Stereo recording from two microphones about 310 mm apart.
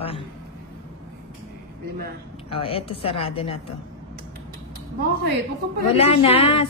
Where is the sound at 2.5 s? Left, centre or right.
Centre.